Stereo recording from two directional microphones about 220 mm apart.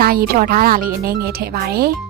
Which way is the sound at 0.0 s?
40° right (ahead or behind).